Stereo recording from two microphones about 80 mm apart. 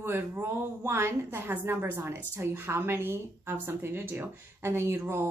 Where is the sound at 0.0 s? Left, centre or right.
Right.